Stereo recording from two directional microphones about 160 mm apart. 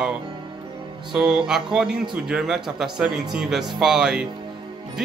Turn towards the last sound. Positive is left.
turn(degrees=-5)  # may be behind; listen again after turning